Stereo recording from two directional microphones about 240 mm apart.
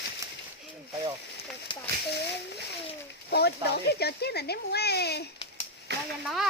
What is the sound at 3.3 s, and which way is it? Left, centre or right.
A child's voice, left.